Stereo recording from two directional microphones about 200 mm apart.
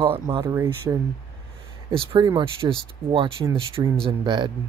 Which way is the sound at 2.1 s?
20° right (ahead or behind).